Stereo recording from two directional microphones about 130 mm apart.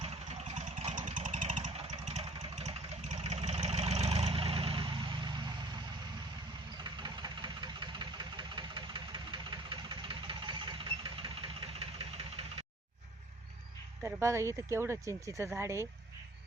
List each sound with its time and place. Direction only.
0.0 s vehicle: 55° right (ahead or behind); by 1.7 s 70° right (ahead or behind)
1.9 s vehicle: 60° right (ahead or behind); by 5.8 s 35° right (ahead or behind)
6.8 s engine: 35° right (ahead or behind)
14.0 s speech: 20° right (ahead or behind)